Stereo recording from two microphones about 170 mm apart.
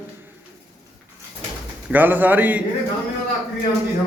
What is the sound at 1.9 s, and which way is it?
Speech, 10° right (ahead or behind).